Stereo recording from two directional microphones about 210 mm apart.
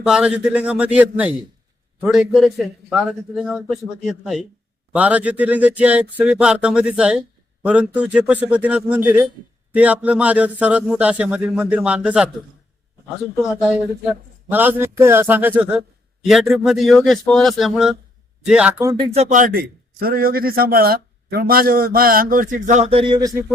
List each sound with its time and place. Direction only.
0.0 s a man's voice: 5° right (ahead or behind)
13.4 s a man's voice: centre (ahead or behind)
18.9 s a man's voice: 25° right (ahead or behind)